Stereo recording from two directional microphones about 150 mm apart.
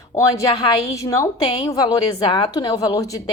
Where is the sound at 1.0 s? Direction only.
20° left (ahead or behind).